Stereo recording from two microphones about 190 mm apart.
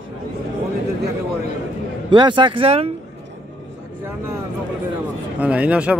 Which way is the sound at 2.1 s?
25° right (ahead or behind).